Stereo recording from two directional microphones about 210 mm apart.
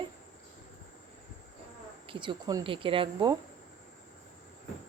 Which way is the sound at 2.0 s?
25° right (ahead or behind).